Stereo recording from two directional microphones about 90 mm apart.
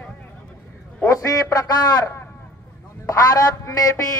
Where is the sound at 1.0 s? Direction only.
40° left (ahead or behind).